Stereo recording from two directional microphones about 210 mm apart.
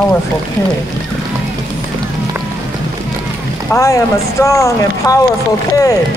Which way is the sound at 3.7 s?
15° left (ahead or behind).